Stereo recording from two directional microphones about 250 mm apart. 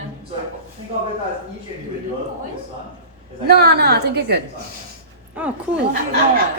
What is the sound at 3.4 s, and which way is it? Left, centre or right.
Speech, right.